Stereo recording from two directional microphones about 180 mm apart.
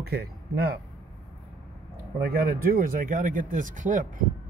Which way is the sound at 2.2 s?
60° right (ahead or behind).